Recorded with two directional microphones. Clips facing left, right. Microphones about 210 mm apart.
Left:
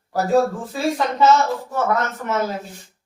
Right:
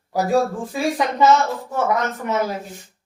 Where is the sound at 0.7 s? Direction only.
15° right (ahead or behind).